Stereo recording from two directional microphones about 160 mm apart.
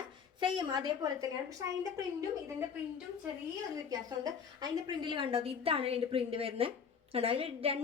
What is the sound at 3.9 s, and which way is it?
A woman's voice, 25° right (ahead or behind).